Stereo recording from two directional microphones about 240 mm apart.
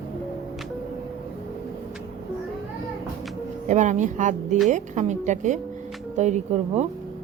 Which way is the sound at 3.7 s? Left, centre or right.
Right.